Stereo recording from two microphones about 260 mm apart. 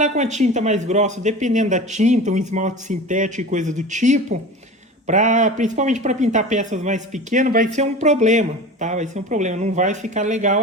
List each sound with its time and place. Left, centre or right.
0.0 s speech: right